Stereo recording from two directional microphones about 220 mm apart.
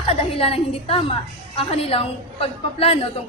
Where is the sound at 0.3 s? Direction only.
25° left (ahead or behind).